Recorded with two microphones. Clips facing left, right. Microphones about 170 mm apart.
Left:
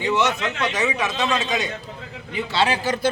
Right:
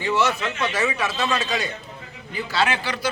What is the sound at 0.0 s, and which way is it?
A man's voice, 20° left (ahead or behind).